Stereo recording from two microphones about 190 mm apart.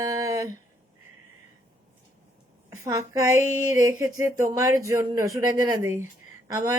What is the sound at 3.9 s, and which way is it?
Speech, 20° right (ahead or behind).